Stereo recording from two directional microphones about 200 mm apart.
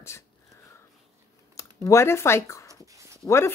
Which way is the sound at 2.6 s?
15° right (ahead or behind).